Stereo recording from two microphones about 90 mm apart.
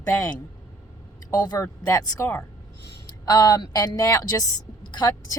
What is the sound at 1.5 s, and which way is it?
Speech, 40° left (ahead or behind).